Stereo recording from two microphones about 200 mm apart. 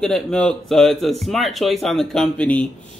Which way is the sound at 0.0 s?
5° left (ahead or behind).